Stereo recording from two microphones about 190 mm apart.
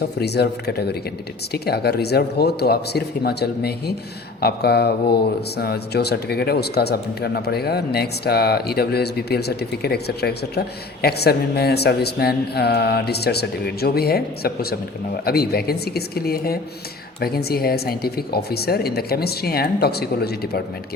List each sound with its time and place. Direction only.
0.0 s speech: 60° left (ahead or behind)